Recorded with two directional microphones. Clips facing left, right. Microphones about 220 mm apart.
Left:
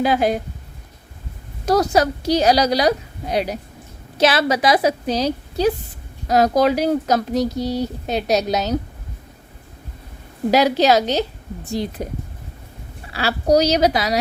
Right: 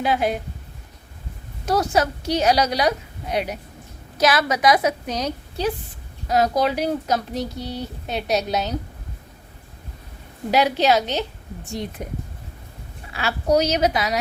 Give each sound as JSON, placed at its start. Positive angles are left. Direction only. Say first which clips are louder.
{"t": 0.0, "sound": "speech", "louder": "left 4 dB", "side_deg": 40}
{"t": 1.6, "sound": "speech", "louder": "left 4 dB", "side_deg": 40}
{"t": 10.5, "sound": "speech", "louder": "left 3 dB", "side_deg": 40}
{"t": 13.1, "sound": "speech", "louder": "left 3 dB", "side_deg": 35}